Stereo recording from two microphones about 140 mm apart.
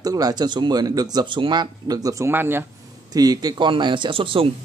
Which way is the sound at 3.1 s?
30° right (ahead or behind).